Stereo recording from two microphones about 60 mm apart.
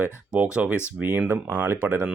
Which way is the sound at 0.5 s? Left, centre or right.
Right.